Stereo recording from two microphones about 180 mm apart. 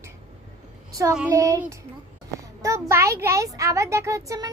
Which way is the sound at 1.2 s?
15° right (ahead or behind).